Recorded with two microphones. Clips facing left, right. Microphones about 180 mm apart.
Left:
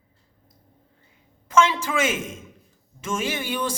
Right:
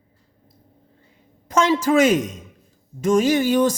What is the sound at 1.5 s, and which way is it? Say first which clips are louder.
Speech: right 3 dB; 40° right (ahead or behind).